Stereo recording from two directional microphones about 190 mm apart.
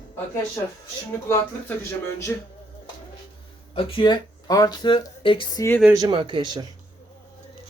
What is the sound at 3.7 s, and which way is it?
Speech, 30° left (ahead or behind).